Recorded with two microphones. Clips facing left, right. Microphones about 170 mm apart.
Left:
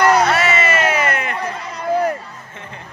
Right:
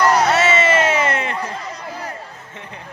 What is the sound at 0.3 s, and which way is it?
Music, 25° right (ahead or behind).